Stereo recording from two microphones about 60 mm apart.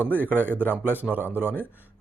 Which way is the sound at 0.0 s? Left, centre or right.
Right.